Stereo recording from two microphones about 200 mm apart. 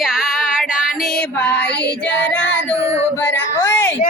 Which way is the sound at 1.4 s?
55° left (ahead or behind).